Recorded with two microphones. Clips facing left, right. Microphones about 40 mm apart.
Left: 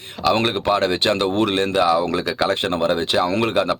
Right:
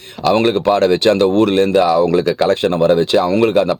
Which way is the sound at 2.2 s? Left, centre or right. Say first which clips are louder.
Right 6 dB; left.